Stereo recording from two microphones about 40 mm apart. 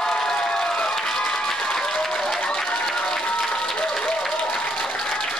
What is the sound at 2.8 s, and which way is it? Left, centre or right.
Applause, centre.